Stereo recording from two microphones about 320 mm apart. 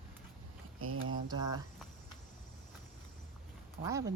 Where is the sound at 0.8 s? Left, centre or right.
Right.